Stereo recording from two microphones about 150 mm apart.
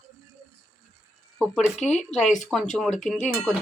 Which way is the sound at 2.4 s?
Centre (ahead or behind).